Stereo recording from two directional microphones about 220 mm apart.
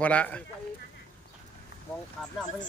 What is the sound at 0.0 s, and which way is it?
Speech, 5° left (ahead or behind).